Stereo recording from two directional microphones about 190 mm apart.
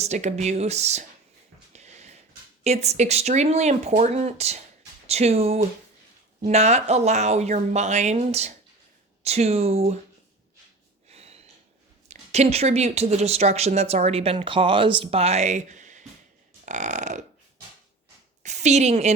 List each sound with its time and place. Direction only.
0.0 s speech: 35° right (ahead or behind)
1.7 s a sound: 35° right (ahead or behind)
2.6 s speech: 35° right (ahead or behind)
11.1 s a sound: 35° right (ahead or behind)
12.0 s speech: 35° right (ahead or behind)
16.6 s burping: 40° right (ahead or behind)
18.4 s speech: 35° right (ahead or behind)